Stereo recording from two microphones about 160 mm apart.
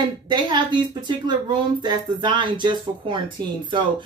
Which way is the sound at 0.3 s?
30° right (ahead or behind).